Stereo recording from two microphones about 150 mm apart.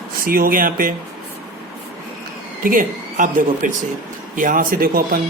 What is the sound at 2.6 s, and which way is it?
A man's voice, 65° right (ahead or behind).